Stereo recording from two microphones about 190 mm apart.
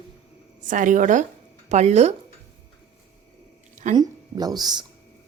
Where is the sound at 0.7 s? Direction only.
40° right (ahead or behind).